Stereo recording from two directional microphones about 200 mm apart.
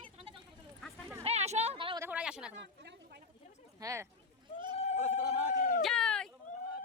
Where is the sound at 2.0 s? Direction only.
5° right (ahead or behind).